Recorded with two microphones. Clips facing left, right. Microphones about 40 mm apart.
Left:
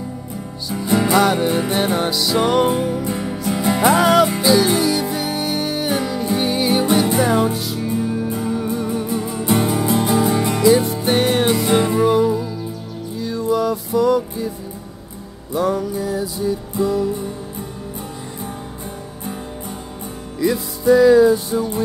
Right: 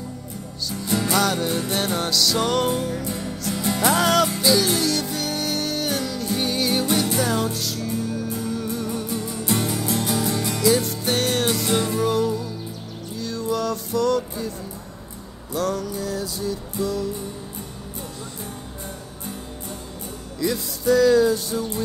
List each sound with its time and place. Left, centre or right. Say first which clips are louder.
0.7 s music: left 6 dB; centre
15.5 s music: left 5 dB; centre
20.3 s music: left 5 dB; centre